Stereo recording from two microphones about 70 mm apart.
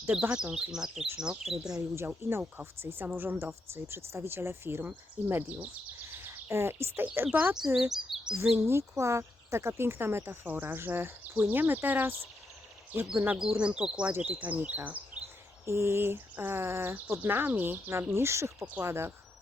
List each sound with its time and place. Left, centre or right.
0.1 s speech: centre
2.0 s speech: right
6.2 s speech: right
7.9 s speech: centre
8.5 s speech: right
13.1 s speech: centre
15.6 s speech: right